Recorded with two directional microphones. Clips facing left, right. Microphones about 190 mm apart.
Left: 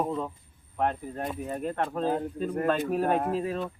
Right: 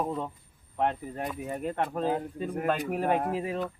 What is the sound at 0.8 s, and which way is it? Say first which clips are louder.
Speech: even; 20° right (ahead or behind).